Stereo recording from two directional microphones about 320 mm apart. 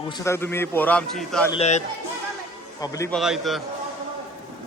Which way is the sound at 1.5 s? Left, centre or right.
Centre.